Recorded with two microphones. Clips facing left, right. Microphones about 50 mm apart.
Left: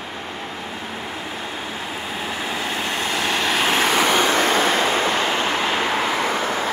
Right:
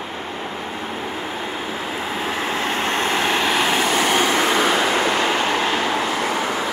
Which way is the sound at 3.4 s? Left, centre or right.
Centre.